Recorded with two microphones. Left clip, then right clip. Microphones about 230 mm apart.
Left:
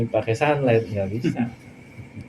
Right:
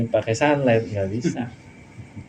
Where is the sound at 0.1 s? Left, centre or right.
Right.